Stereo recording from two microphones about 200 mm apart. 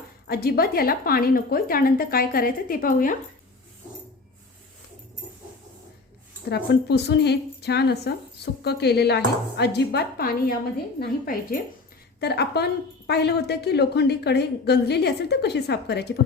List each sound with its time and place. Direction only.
0.3 s a woman's voice: 50° left (ahead or behind)
6.5 s a woman's voice: 55° left (ahead or behind)